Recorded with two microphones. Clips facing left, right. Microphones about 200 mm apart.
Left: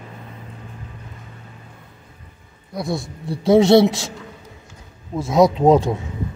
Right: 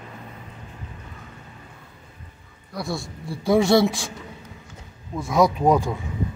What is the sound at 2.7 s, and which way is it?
Speech, 20° left (ahead or behind).